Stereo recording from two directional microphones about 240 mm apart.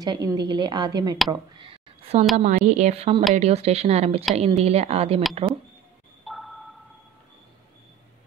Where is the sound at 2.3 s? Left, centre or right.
Right.